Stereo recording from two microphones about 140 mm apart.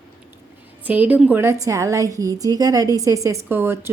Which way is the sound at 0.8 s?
10° right (ahead or behind).